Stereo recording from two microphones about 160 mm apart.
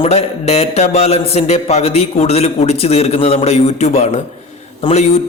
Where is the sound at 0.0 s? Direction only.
40° left (ahead or behind).